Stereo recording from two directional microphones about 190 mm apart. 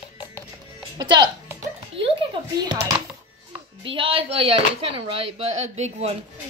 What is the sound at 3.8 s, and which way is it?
Speech, 25° right (ahead or behind).